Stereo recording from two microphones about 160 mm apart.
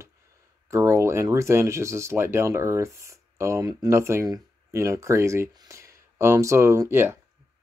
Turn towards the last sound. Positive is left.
turn(degrees=-15)  # may be behind; listen again after turning